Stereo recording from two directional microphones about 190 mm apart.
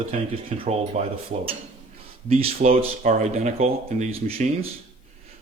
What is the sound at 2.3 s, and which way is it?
Speech, 30° right (ahead or behind).